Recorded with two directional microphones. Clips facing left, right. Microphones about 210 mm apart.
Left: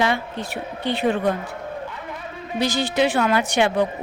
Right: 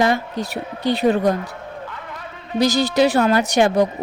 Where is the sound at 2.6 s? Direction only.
40° right (ahead or behind).